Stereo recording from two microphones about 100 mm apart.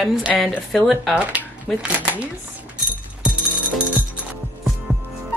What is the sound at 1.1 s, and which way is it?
Speech, 10° right (ahead or behind).